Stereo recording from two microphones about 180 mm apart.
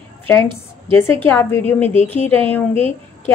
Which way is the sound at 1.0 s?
10° left (ahead or behind).